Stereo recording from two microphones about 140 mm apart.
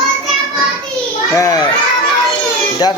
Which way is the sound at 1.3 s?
25° left (ahead or behind).